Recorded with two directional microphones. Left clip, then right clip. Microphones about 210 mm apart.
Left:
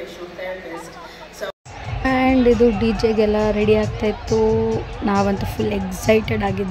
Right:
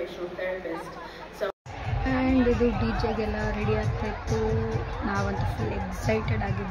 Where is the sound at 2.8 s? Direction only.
40° left (ahead or behind).